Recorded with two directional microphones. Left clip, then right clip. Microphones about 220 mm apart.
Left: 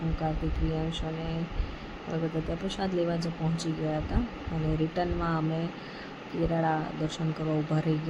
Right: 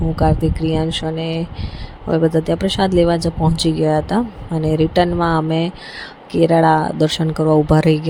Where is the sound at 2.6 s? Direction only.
40° right (ahead or behind).